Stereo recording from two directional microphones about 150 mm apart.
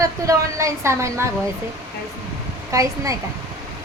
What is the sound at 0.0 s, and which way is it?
A woman's voice, 20° right (ahead or behind).